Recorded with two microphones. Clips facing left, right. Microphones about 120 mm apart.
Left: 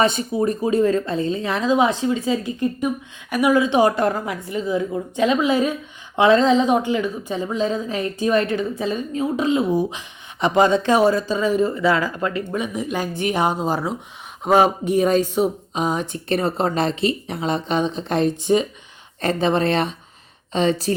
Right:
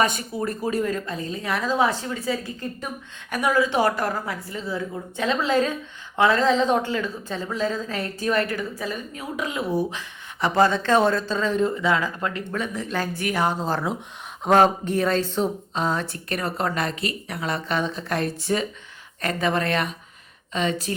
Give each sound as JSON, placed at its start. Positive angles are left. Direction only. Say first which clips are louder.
{"t": 0.0, "sound": "a woman's voice", "louder": "left 5 dB", "side_deg": 25}
{"t": 12.5, "sound": "a woman's voice", "louder": "left 3 dB", "side_deg": 15}
{"t": 16.3, "sound": "a woman's voice", "louder": "left 6 dB", "side_deg": 25}